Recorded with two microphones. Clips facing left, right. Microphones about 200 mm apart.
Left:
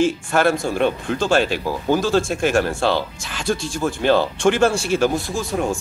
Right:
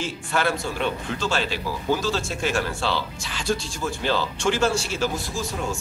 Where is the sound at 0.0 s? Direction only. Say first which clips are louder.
Left 8 dB; 50° left (ahead or behind).